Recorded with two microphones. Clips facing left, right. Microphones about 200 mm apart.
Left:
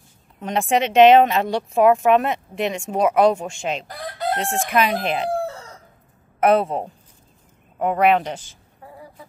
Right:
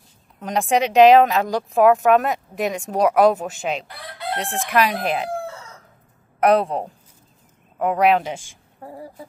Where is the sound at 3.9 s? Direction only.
40° left (ahead or behind).